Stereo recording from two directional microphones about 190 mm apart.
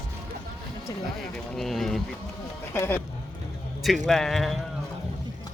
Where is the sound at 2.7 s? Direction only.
10° left (ahead or behind).